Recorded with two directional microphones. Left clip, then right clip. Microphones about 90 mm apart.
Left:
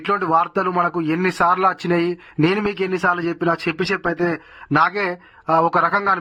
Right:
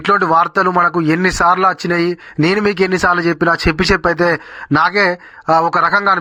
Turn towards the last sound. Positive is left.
turn(degrees=-35)  # may be behind; listen again after turning